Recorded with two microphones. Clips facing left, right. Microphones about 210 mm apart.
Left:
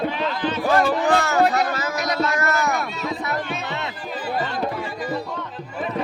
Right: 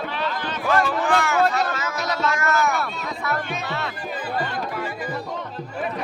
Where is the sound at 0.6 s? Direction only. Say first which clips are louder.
Left 2 dB; 40° left (ahead or behind).